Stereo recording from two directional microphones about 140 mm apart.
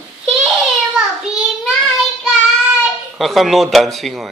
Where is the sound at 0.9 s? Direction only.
Centre (ahead or behind).